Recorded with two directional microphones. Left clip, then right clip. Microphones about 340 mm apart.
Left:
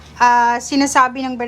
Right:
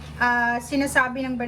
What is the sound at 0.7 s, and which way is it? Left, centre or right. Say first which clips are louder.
Speech: left 7 dB; centre.